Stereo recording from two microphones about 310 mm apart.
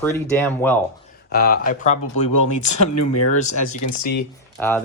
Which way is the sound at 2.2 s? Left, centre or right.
Left.